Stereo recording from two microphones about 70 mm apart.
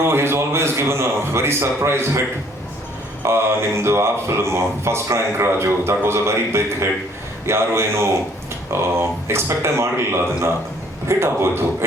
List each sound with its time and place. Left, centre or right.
0.1 s speech: right
3.2 s speech: right